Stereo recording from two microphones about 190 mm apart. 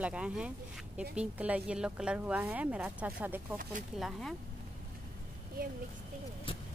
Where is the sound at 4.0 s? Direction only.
Centre (ahead or behind).